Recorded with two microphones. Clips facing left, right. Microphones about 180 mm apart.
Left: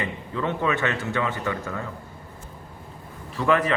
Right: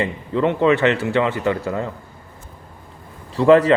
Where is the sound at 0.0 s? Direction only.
25° right (ahead or behind).